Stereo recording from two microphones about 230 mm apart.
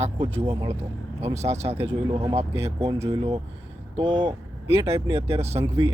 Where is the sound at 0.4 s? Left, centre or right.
Centre.